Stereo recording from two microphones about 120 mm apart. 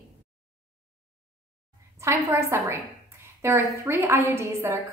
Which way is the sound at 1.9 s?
25° right (ahead or behind).